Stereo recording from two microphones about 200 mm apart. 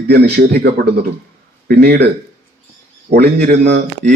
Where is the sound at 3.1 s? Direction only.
50° right (ahead or behind).